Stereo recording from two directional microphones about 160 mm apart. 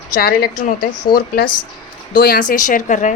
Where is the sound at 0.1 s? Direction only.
70° left (ahead or behind).